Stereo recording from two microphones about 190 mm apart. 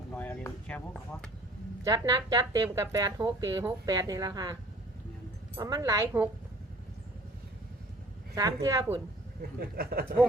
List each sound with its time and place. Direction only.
0.1 s a sound: 5° left (ahead or behind)
1.8 s speech: 20° right (ahead or behind)
5.5 s a woman's voice: 20° right (ahead or behind)
8.4 s a woman's voice: 15° right (ahead or behind)
9.6 s speech: 55° right (ahead or behind)